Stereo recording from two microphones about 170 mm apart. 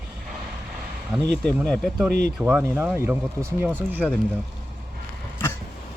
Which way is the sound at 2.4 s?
10° right (ahead or behind).